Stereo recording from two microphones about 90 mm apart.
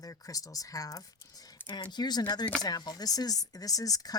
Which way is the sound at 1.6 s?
20° left (ahead or behind).